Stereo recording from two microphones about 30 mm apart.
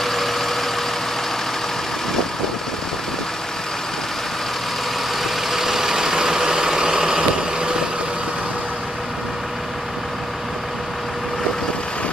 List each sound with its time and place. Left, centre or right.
0.0 s vehicle: centre
5.2 s vehicle: centre